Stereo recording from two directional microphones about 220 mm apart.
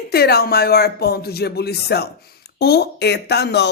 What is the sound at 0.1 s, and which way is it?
Speech, 45° left (ahead or behind).